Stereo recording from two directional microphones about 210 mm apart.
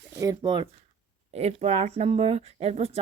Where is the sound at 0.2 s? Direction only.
20° right (ahead or behind).